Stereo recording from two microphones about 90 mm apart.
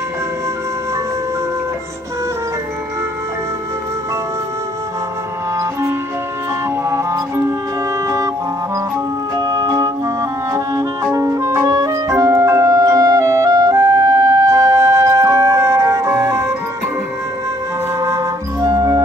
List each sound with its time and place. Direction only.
5.6 s music: 35° right (ahead or behind)
9.4 s music: 40° right (ahead or behind)
18.0 s music: 35° right (ahead or behind)